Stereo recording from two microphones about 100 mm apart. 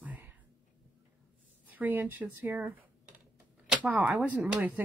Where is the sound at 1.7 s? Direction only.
15° right (ahead or behind).